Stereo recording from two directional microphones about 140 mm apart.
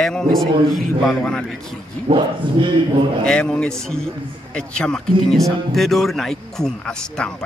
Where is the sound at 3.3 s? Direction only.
5° left (ahead or behind).